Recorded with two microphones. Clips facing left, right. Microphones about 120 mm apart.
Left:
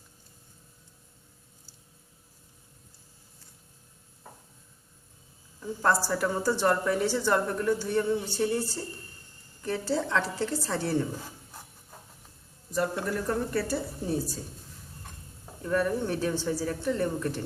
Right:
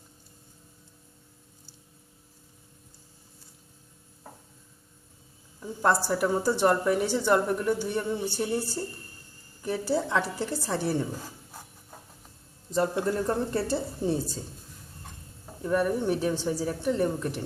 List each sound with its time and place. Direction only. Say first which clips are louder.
5.8 s a woman's voice: right 2 dB; 15° right (ahead or behind)
12.7 s a woman's voice: right 3 dB; 25° right (ahead or behind)
15.6 s a woman's voice: right 2 dB; 15° right (ahead or behind)